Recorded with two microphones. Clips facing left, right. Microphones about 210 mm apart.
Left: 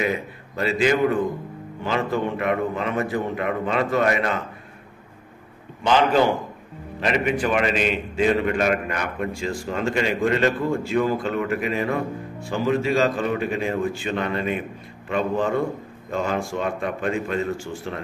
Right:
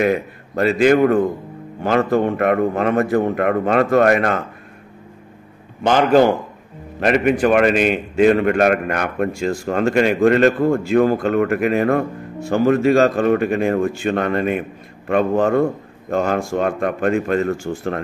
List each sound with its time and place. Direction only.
0.0 s a man's voice: 55° right (ahead or behind)
5.9 s a man's voice: 50° right (ahead or behind)